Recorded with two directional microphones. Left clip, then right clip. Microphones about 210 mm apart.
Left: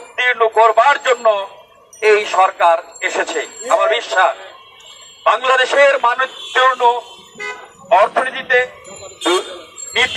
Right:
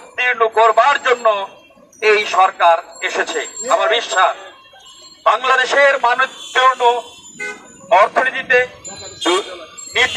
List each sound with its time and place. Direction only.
0.2 s a man's voice: 5° right (ahead or behind)